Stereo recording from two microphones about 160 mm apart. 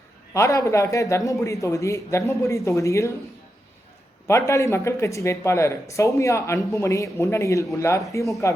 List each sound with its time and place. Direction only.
0.3 s speech: 20° left (ahead or behind)
4.3 s speech: 20° left (ahead or behind)